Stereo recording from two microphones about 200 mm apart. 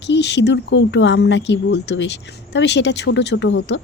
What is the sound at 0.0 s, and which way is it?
A woman's voice, 60° left (ahead or behind).